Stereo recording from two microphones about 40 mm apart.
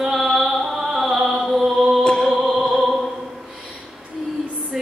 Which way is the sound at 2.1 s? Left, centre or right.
Centre.